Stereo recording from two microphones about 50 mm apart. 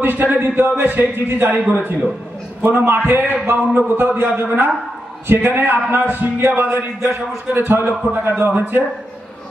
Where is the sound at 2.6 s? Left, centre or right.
Right.